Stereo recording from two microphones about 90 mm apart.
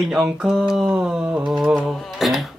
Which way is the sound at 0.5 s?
5° right (ahead or behind).